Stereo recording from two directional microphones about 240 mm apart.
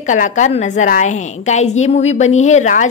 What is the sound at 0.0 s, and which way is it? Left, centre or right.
A woman's voice, left.